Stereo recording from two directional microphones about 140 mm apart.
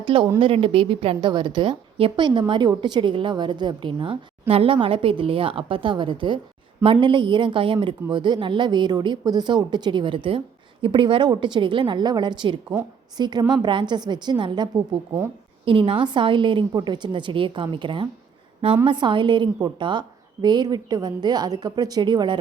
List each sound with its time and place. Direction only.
0.0 s a woman's voice: 35° right (ahead or behind)